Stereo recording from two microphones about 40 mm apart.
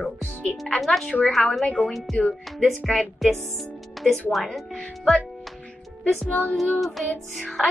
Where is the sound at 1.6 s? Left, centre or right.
Left.